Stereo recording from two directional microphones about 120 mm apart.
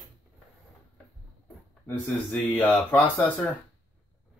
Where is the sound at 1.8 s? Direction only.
15° left (ahead or behind).